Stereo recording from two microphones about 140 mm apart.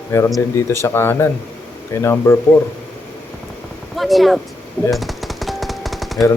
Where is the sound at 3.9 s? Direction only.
Centre (ahead or behind).